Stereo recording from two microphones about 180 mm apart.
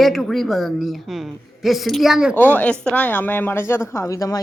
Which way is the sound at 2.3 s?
10° left (ahead or behind).